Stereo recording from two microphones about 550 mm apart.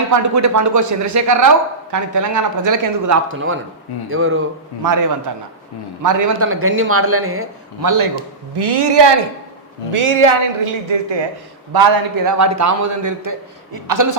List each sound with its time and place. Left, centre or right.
0.1 s a man's voice: right
3.2 s speech: right
4.8 s a man's voice: right
8.5 s speech: right
9.9 s speech: right
11.7 s a man's voice: right